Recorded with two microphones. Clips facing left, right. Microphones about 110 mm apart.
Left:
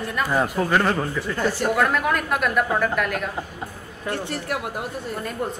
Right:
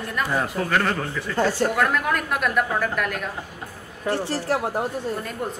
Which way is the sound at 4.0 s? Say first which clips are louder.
Right 3 dB; 30° right (ahead or behind).